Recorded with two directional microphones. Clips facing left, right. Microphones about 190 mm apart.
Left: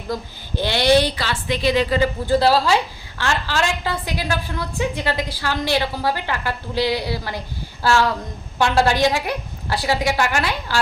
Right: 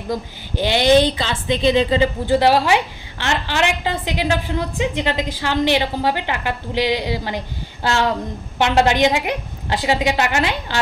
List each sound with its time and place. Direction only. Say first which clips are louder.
0.1 s a woman's voice: right 2 dB; 15° right (ahead or behind)